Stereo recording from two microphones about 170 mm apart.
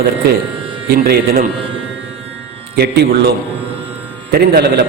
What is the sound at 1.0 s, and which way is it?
Mantra, 60° right (ahead or behind).